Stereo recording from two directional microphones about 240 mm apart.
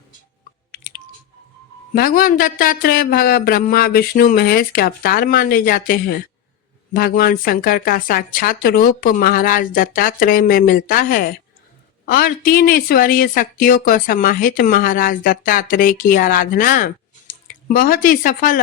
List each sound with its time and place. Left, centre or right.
1.9 s speech: left